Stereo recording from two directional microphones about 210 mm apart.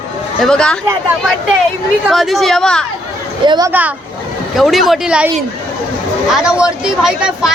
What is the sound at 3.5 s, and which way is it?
Speech, 15° right (ahead or behind).